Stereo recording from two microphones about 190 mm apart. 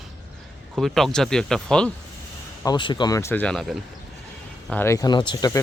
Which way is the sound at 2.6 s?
25° left (ahead or behind).